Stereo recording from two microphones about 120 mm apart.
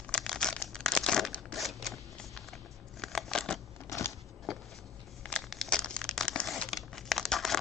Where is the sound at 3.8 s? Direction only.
25° left (ahead or behind).